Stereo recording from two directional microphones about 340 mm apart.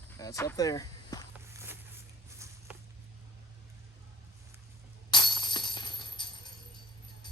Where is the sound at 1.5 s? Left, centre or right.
Centre.